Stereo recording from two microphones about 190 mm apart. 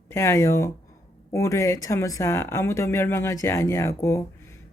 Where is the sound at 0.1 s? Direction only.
15° left (ahead or behind).